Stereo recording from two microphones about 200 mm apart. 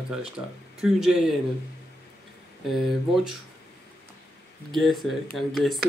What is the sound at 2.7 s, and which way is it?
Speech, centre (ahead or behind).